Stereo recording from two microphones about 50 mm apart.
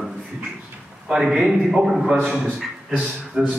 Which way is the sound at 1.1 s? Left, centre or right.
Centre.